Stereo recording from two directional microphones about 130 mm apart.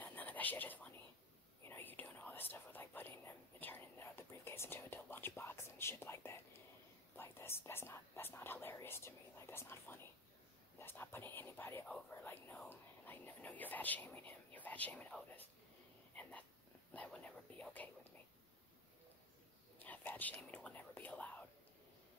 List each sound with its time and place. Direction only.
0.0 s a sound: 15° left (ahead or behind)
1.6 s whispering: 15° left (ahead or behind)
7.2 s speech: 20° left (ahead or behind)
16.2 s a sound: 10° left (ahead or behind)
16.9 s speech: 10° left (ahead or behind)
19.8 s speech: 15° left (ahead or behind)